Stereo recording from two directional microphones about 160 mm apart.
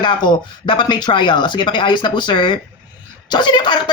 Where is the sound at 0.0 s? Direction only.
30° left (ahead or behind).